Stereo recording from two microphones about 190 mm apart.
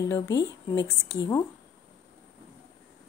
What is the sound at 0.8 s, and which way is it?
Speech, 15° right (ahead or behind).